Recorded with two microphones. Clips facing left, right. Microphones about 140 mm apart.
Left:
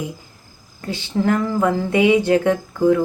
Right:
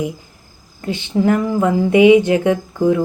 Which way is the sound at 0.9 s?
20° right (ahead or behind).